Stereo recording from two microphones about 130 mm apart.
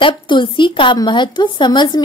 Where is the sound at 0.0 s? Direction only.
40° left (ahead or behind).